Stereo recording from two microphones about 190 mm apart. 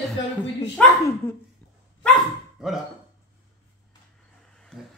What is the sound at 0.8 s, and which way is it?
Music, 5° left (ahead or behind).